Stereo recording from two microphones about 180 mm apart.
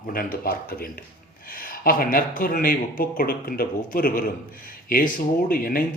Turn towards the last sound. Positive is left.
turn(degrees=50)  # may be behind; listen again after turning